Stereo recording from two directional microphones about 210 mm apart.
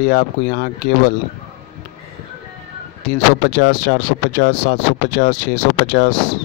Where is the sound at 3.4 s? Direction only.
50° left (ahead or behind).